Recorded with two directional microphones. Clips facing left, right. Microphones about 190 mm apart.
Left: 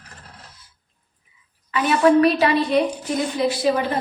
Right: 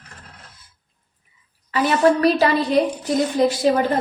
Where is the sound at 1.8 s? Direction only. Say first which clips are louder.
Left 1 dB; 40° right (ahead or behind).